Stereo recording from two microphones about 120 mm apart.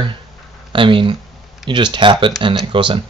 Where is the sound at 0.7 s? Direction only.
45° right (ahead or behind).